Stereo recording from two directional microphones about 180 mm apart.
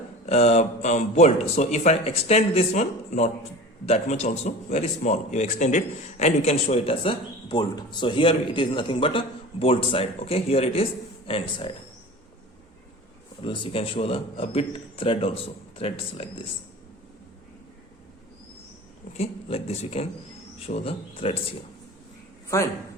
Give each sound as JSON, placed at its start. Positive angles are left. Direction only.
{"t": 0.3, "sound": "a man's voice", "side_deg": 35}
{"t": 13.4, "sound": "a man's voice", "side_deg": 30}
{"t": 19.1, "sound": "a man's voice", "side_deg": 35}
{"t": 22.4, "sound": "speech", "side_deg": 15}